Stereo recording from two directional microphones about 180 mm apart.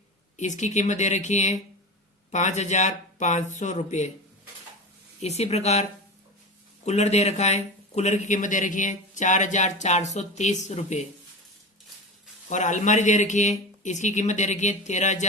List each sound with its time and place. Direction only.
0.3 s speech: 40° left (ahead or behind)
5.2 s speech: 35° left (ahead or behind)
6.8 s speech: 40° left (ahead or behind)
12.5 s speech: 45° left (ahead or behind)